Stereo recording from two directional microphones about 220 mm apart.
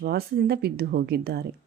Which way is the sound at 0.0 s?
45° right (ahead or behind).